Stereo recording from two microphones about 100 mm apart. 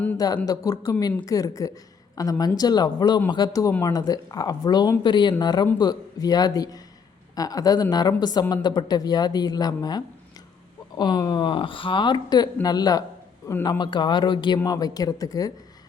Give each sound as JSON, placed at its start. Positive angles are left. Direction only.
{"t": 0.4, "sound": "a woman's voice", "side_deg": 40}
{"t": 3.7, "sound": "speech", "side_deg": 25}
{"t": 3.9, "sound": "a woman's voice", "side_deg": 40}